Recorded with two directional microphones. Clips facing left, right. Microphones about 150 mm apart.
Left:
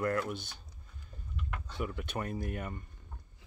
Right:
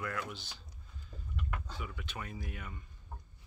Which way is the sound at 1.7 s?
50° left (ahead or behind).